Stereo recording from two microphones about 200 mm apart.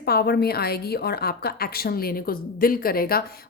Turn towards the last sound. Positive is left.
turn(degrees=50)  # may be behind; listen again after turning